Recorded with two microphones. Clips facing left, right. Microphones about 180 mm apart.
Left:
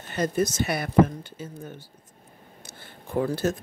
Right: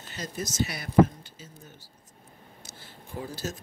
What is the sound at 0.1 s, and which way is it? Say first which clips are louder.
Speech: left 11 dB; 55° left (ahead or behind).